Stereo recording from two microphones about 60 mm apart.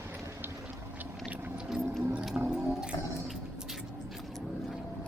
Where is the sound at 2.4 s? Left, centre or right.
Centre.